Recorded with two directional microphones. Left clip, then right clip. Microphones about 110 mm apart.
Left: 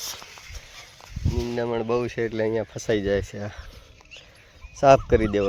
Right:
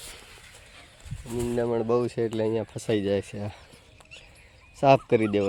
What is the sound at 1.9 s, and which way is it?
Speech, 20° right (ahead or behind).